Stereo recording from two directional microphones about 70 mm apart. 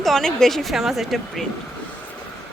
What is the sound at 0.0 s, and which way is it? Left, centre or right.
Speech, centre.